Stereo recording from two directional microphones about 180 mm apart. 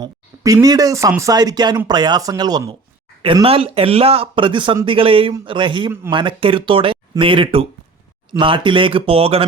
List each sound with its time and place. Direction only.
0.0 s speech: 20° right (ahead or behind)